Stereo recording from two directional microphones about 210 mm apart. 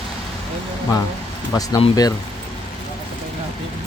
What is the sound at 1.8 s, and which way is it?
Speech, 15° left (ahead or behind).